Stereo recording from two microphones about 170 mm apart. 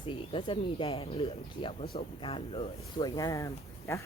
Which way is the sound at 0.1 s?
30° left (ahead or behind).